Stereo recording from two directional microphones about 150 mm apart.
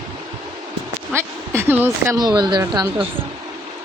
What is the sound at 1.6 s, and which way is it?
Speech, 15° right (ahead or behind).